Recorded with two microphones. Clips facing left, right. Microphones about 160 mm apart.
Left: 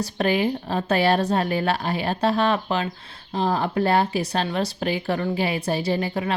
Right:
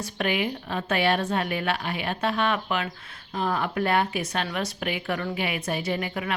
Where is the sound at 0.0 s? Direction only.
35° left (ahead or behind).